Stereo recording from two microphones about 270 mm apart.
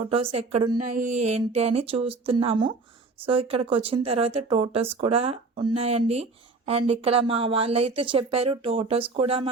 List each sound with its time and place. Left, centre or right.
0.0 s speech: right